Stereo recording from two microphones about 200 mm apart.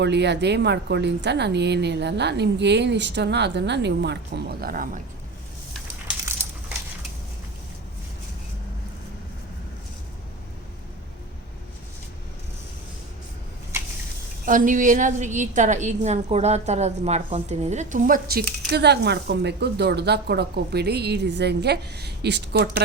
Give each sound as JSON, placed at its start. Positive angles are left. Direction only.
{"t": 0.0, "sound": "a woman's voice", "side_deg": -60}
{"t": 14.4, "sound": "a woman's voice", "side_deg": -40}